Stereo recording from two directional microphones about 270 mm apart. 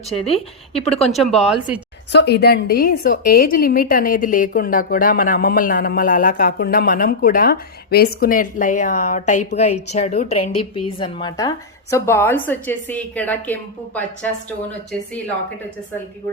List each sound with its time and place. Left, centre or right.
0.2 s a woman's voice: left
1.1 s a woman's voice: centre
2.1 s a woman's voice: left; by 14.3 s centre